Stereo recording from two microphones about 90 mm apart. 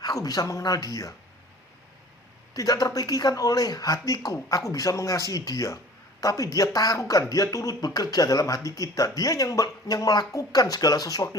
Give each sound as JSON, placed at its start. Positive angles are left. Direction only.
{"t": 0.0, "sound": "speech", "side_deg": 45}
{"t": 2.5, "sound": "speech", "side_deg": 40}